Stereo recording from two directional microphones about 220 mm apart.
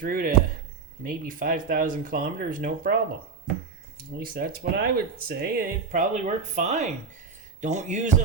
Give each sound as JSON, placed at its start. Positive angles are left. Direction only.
{"t": 0.0, "sound": "speech", "side_deg": -40}
{"t": 4.2, "sound": "speech", "side_deg": -40}